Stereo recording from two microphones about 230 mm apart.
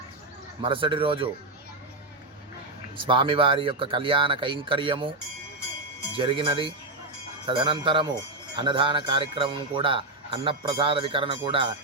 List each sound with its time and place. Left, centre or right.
0.6 s speech: right
3.1 s speech: right
6.1 s speech: right